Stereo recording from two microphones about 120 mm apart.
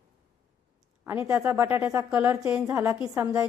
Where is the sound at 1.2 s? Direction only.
20° right (ahead or behind).